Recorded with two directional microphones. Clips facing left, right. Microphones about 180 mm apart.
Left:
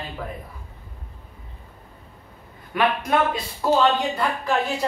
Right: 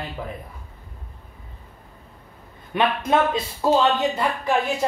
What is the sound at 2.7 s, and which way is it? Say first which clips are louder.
A man's voice: right 1 dB; 20° right (ahead or behind).